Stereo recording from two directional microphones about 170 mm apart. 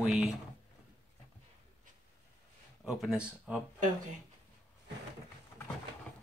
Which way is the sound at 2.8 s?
5° right (ahead or behind).